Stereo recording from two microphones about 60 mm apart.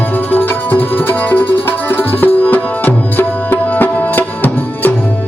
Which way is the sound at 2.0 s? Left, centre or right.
Left.